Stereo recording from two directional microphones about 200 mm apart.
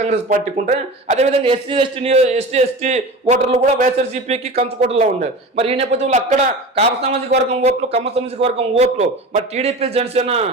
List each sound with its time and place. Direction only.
0.0 s a man's voice: 40° right (ahead or behind)